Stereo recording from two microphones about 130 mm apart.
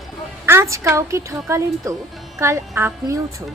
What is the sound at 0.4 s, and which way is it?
A woman's voice, 20° right (ahead or behind).